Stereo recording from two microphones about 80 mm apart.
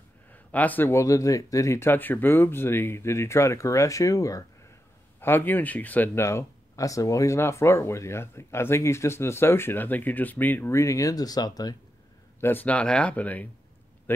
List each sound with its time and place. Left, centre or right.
0.3 s a sound: centre
0.8 s speech: left
5.2 s speech: left
6.1 s speech: left
10.7 s speech: left
12.4 s speech: left
12.6 s speech: centre